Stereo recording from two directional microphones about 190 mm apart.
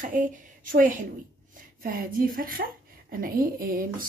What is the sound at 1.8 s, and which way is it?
A woman's voice, 50° right (ahead or behind).